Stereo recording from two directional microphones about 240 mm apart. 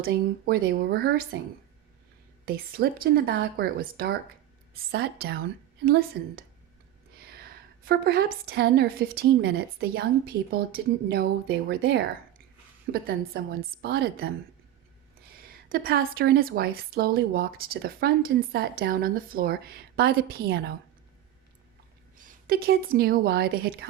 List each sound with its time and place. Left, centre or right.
0.0 s a woman's voice: right
2.5 s a woman's voice: right
15.4 s a woman's voice: right
22.2 s speech: right